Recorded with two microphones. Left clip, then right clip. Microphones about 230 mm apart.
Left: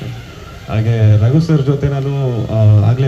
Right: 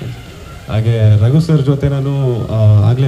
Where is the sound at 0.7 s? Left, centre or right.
Right.